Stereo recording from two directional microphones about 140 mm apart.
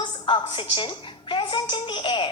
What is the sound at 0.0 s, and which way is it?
A woman's voice, 35° left (ahead or behind).